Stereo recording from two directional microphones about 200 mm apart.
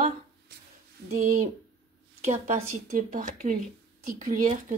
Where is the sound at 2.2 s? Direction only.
35° right (ahead or behind).